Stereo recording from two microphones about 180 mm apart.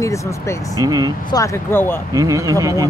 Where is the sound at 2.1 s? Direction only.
20° right (ahead or behind).